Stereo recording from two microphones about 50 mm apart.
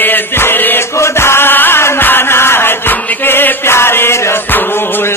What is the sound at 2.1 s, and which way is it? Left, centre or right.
Music, left.